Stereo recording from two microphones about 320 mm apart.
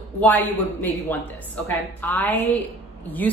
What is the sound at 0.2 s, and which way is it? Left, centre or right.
A woman's voice, centre.